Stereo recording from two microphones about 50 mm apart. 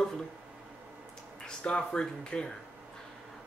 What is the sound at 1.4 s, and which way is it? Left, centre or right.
Speech, centre.